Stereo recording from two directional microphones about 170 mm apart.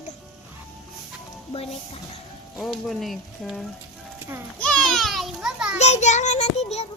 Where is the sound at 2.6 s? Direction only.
Centre (ahead or behind).